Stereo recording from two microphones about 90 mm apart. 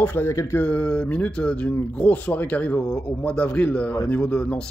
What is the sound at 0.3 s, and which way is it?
Speech, 35° left (ahead or behind).